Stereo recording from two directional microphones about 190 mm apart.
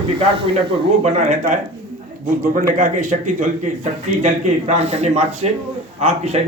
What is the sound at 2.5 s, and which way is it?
A man's voice, 45° right (ahead or behind).